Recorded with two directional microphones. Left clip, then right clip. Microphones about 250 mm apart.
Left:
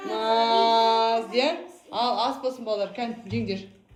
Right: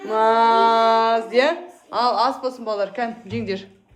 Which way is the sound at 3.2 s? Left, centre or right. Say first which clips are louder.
Right 4 dB; centre.